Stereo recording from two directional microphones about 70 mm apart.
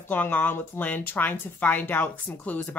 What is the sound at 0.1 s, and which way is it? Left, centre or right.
Speech, left.